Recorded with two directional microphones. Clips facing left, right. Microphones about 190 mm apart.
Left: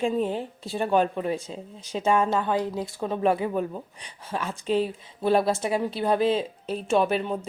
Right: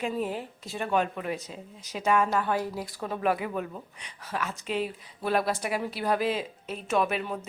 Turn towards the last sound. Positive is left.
turn(degrees=30)  # may be behind; listen again after turning